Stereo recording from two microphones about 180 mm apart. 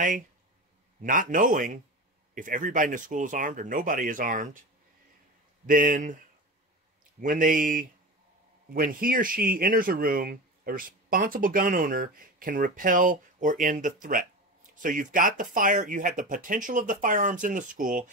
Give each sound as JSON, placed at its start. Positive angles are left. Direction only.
{"t": 1.0, "sound": "speech", "side_deg": -50}
{"t": 5.7, "sound": "speech", "side_deg": -50}
{"t": 7.2, "sound": "speech", "side_deg": -50}